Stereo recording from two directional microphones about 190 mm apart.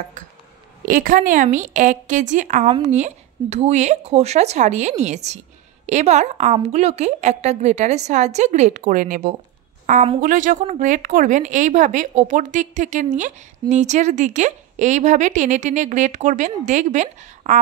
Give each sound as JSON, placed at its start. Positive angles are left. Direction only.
{"t": 0.8, "sound": "a woman's voice", "side_deg": -45}